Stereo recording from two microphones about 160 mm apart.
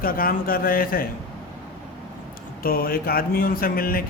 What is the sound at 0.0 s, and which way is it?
A man's voice, 65° left (ahead or behind).